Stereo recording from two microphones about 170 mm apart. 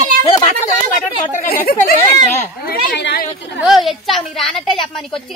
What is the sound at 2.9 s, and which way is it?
Speech, 75° left (ahead or behind).